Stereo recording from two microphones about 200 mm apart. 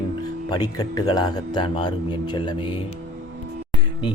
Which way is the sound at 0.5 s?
20° left (ahead or behind).